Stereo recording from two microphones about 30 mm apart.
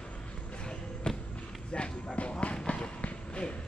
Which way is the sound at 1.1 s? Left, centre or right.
Left.